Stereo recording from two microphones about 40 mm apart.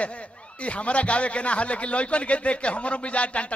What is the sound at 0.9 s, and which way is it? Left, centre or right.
A man's voice, left.